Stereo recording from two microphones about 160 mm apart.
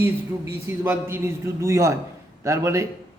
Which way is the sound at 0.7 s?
15° right (ahead or behind).